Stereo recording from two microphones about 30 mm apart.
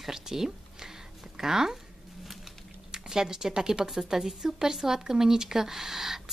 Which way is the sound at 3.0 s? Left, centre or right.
Right.